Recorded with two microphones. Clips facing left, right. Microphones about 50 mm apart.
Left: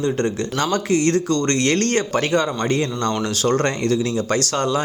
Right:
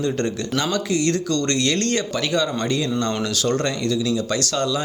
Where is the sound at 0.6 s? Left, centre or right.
Left.